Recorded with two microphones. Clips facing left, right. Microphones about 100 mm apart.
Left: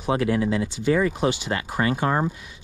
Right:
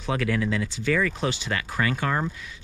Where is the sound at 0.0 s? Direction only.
25° left (ahead or behind).